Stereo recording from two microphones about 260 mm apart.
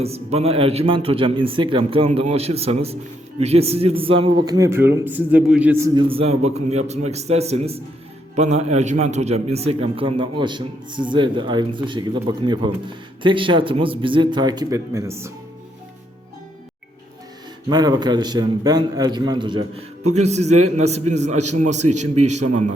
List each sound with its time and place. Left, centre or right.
0.0 s a man's voice: right
17.7 s a man's voice: centre